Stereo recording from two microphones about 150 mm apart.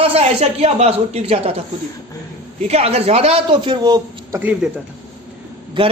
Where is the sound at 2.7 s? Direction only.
45° right (ahead or behind); by 4.4 s 25° right (ahead or behind).